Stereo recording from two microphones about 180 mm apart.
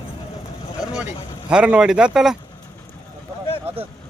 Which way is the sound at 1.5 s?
5° right (ahead or behind).